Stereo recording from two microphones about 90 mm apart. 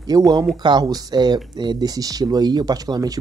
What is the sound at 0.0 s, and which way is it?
Speech, 50° right (ahead or behind).